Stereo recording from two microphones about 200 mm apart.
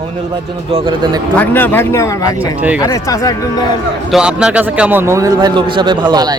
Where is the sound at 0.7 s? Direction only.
25° right (ahead or behind).